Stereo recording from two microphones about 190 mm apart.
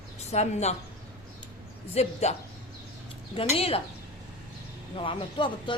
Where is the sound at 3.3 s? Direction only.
30° left (ahead or behind).